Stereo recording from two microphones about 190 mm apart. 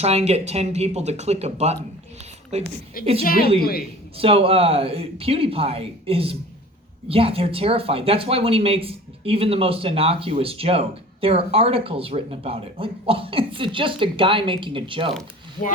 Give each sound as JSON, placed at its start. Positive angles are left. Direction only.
{"t": 0.0, "sound": "speech", "side_deg": -35}
{"t": 3.2, "sound": "a woman's voice", "side_deg": 50}
{"t": 4.2, "sound": "speech", "side_deg": -30}